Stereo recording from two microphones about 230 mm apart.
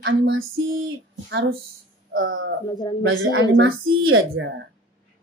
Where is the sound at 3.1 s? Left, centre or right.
Right.